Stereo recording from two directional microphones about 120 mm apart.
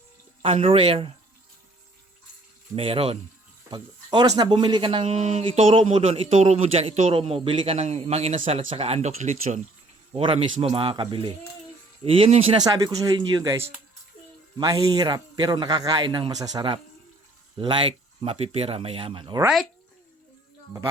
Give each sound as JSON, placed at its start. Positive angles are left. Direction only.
{"t": 0.4, "sound": "speech", "side_deg": -50}
{"t": 2.7, "sound": "speech", "side_deg": -50}
{"t": 3.7, "sound": "a man's voice", "side_deg": -35}
{"t": 5.4, "sound": "speech", "side_deg": -50}
{"t": 10.1, "sound": "speech", "side_deg": -45}
{"t": 12.6, "sound": "a man's voice", "side_deg": -30}
{"t": 17.6, "sound": "speech", "side_deg": -45}